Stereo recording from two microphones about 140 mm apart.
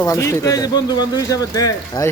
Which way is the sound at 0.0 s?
20° left (ahead or behind).